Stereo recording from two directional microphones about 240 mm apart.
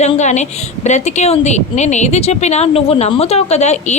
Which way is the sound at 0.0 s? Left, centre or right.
Left.